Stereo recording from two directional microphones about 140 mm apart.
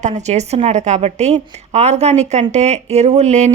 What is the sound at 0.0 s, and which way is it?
A woman's voice, 55° right (ahead or behind).